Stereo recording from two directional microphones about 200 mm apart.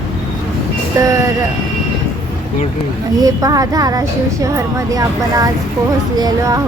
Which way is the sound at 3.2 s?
20° right (ahead or behind).